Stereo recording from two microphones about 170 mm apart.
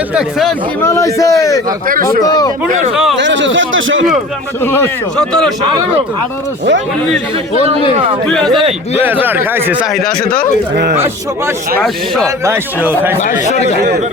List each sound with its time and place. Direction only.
0.1 s speech: centre (ahead or behind)
0.8 s a man's voice: 15° left (ahead or behind)
2.6 s speech: 50° right (ahead or behind)
2.9 s speech: centre (ahead or behind)
3.2 s a man's voice: 90° right
4.6 s speech: 10° left (ahead or behind)
8.3 s speech: 5° left (ahead or behind)
9.0 s a man's voice: 10° right (ahead or behind)
11.8 s speech: centre (ahead or behind)
12.5 s a man's voice: 10° right (ahead or behind)
13.2 s speech: 45° left (ahead or behind)